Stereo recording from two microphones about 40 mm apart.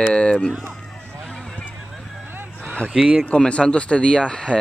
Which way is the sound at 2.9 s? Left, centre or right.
Centre.